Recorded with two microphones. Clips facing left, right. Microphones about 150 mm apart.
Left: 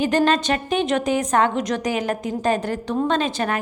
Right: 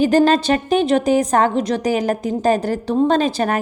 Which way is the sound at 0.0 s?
35° right (ahead or behind).